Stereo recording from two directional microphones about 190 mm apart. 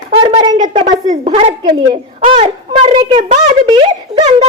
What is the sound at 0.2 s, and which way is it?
A woman's voice, 30° right (ahead or behind).